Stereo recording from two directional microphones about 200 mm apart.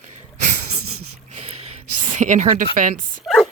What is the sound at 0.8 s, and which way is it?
Wheeze, 90° right.